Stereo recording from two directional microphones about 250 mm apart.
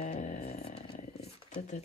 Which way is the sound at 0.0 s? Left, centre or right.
Left.